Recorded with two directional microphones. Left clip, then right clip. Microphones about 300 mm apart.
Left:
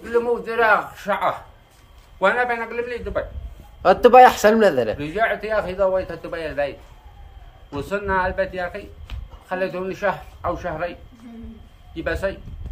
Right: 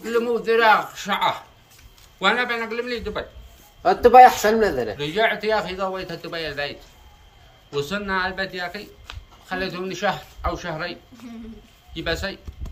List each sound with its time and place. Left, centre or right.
0.1 s a man's voice: centre
3.8 s speech: left
4.9 s a man's voice: centre